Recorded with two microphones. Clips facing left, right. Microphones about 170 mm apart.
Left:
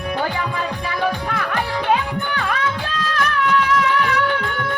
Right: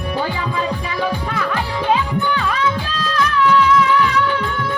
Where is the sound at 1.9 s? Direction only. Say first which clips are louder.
Right 3 dB; 55° left (ahead or behind).